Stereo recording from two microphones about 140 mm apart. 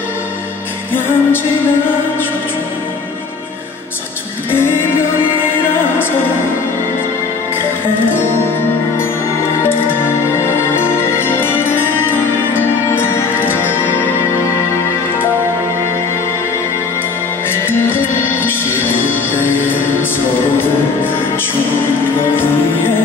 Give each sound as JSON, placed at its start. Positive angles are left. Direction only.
{"t": 0.9, "sound": "music", "side_deg": 15}
{"t": 4.5, "sound": "music", "side_deg": 15}
{"t": 9.6, "sound": "music", "side_deg": 15}
{"t": 17.5, "sound": "music", "side_deg": 15}
{"t": 22.3, "sound": "music", "side_deg": 15}